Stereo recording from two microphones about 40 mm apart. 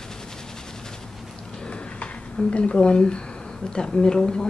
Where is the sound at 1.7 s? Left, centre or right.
Left.